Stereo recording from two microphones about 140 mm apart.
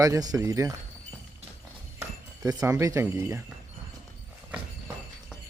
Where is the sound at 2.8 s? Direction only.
20° right (ahead or behind).